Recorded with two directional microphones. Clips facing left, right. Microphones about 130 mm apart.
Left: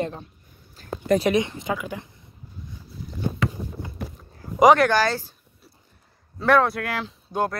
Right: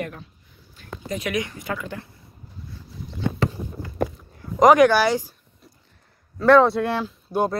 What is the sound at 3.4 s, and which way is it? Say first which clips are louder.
Walk: right 2 dB; 35° right (ahead or behind).